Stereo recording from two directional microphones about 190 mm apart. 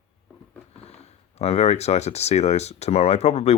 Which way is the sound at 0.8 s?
35° left (ahead or behind).